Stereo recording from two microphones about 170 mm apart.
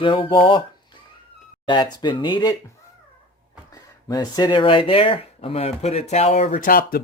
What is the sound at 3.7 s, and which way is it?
Speech, 20° left (ahead or behind).